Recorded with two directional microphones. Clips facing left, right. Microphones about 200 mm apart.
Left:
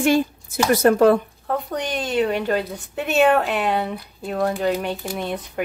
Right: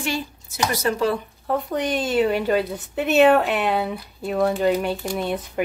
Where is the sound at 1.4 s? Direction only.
Centre (ahead or behind).